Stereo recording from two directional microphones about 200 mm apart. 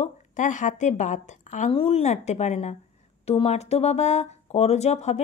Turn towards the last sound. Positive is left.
turn(degrees=35)  # may be behind; listen again after turning